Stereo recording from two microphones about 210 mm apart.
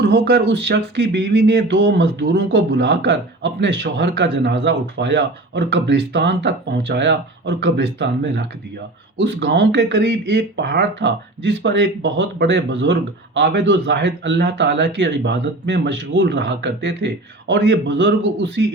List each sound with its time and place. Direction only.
0.0 s speech: 55° right (ahead or behind)